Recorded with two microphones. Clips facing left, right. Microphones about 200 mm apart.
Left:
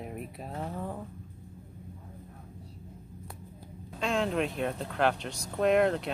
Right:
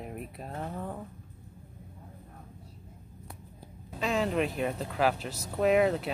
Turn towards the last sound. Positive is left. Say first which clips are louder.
# even
turn(degrees=-5)  # may be behind; listen again after turning